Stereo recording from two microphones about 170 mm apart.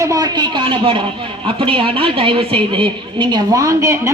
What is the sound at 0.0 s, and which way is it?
A woman's voice, 20° right (ahead or behind).